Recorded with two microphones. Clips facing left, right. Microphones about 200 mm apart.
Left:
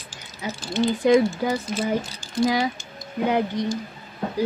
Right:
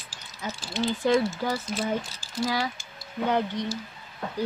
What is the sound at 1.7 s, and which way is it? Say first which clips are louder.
Speech: left 4 dB; centre (ahead or behind).